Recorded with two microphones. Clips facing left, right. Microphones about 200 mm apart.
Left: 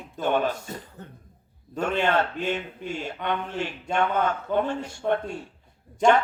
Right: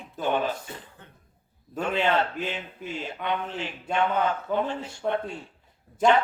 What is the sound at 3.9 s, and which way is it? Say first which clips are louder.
A man's voice: even; 50° left (ahead or behind).